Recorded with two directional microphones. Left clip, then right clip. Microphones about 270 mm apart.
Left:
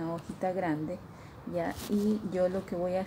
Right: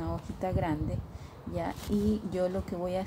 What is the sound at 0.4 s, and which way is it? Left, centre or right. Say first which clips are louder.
Speech: left 1 dB; centre.